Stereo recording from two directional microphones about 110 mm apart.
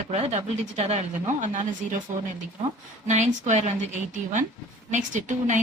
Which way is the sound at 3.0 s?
90° right.